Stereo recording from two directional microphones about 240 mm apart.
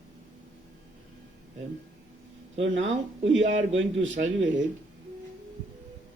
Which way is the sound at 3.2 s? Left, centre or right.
Right.